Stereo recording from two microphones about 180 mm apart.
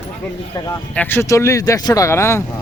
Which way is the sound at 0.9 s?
10° left (ahead or behind).